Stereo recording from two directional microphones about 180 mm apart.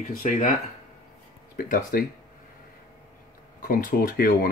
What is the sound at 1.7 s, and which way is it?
Speech, 50° left (ahead or behind).